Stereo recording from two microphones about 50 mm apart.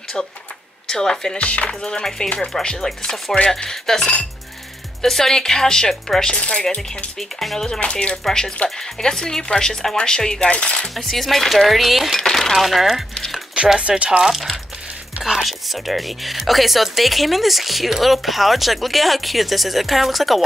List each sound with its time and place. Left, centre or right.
0.8 s speech: centre
1.4 s speech: left
7.2 s speech: centre
7.8 s speech: left
11.0 s speech: centre
12.2 s speech: centre
12.5 s speech: centre
13.7 s speech: right
14.2 s speech: centre